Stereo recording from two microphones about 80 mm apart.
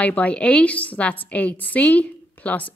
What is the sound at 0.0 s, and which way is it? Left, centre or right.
A woman's voice, centre.